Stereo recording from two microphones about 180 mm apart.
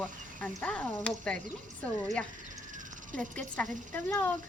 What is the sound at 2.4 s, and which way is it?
Crow, 45° right (ahead or behind).